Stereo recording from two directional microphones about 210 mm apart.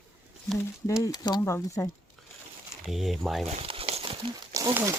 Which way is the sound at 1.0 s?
20° left (ahead or behind).